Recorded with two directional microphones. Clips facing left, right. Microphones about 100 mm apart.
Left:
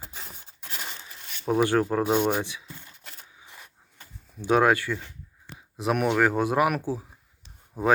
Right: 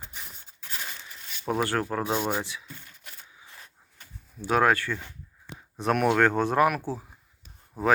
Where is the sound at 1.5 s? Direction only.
20° left (ahead or behind).